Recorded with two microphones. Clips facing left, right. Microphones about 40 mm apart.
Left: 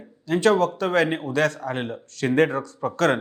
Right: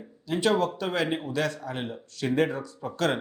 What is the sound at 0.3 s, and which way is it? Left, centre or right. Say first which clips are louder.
Speech: left 5 dB; left.